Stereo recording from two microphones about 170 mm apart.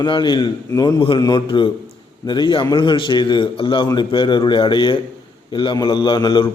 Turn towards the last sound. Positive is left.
turn(degrees=30)  # may be behind; listen again after turning